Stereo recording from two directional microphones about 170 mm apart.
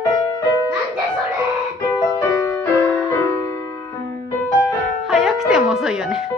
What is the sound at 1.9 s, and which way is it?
Music, 15° left (ahead or behind).